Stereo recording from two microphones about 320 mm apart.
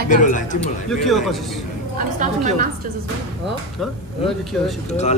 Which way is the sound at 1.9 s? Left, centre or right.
Right.